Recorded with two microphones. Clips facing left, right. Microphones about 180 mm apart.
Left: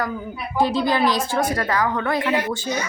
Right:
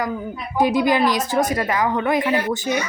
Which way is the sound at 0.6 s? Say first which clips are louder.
Right 2 dB; 15° right (ahead or behind).